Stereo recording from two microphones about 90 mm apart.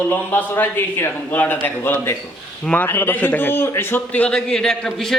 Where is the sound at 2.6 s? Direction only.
15° left (ahead or behind).